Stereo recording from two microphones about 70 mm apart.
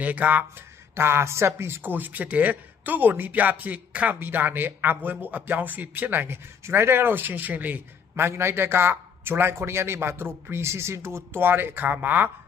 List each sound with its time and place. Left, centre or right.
0.0 s a man's voice: right
0.9 s a man's voice: right